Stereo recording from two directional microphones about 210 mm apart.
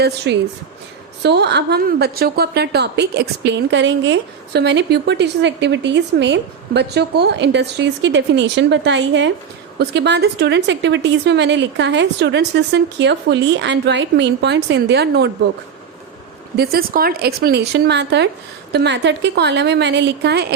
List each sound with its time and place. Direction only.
0.3 s a woman's voice: 55° right (ahead or behind)
16.6 s a woman's voice: 45° right (ahead or behind)